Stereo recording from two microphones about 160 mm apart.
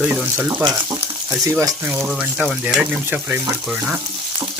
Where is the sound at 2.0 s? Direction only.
5° right (ahead or behind).